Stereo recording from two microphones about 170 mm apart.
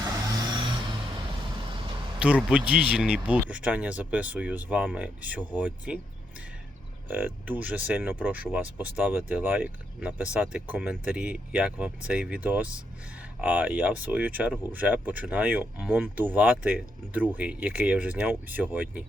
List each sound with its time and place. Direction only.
0.0 s vehicle: 25° right (ahead or behind)
2.1 s speech: 5° right (ahead or behind)
7.1 s speech: 10° right (ahead or behind)